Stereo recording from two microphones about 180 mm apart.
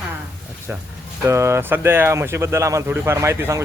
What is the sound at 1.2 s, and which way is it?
Speech, 15° right (ahead or behind).